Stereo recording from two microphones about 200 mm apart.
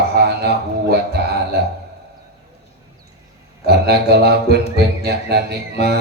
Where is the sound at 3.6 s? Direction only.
55° right (ahead or behind).